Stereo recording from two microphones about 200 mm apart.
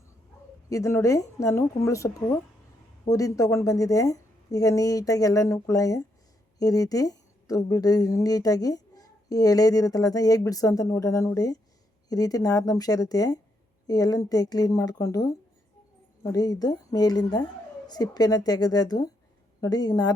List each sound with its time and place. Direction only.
0.7 s a woman's voice: 15° left (ahead or behind)